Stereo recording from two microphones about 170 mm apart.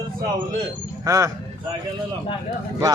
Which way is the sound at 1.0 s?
20° right (ahead or behind).